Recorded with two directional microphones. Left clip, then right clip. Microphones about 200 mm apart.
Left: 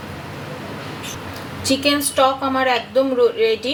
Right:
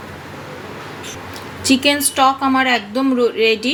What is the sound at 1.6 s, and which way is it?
A woman's voice, 35° right (ahead or behind).